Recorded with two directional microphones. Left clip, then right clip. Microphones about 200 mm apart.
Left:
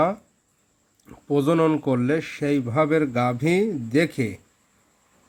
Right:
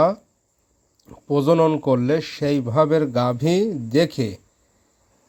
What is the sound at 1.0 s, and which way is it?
Speech, 15° right (ahead or behind).